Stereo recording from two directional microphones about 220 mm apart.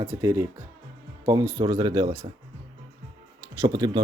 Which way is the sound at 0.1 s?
15° right (ahead or behind).